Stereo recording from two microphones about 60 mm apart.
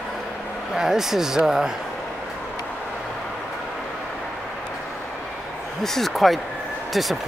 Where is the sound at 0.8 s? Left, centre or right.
Centre.